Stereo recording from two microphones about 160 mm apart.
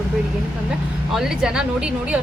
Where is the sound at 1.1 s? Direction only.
5° right (ahead or behind).